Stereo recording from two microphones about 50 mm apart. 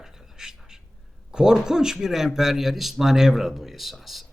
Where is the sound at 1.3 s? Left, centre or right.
Centre.